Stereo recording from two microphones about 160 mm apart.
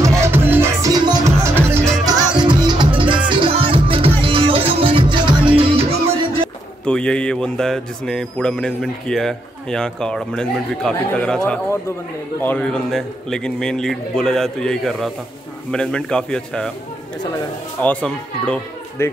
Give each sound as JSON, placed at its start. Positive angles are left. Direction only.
{"t": 0.0, "sound": "music", "side_deg": -15}
{"t": 6.8, "sound": "speech", "side_deg": 5}
{"t": 17.8, "sound": "speech", "side_deg": 10}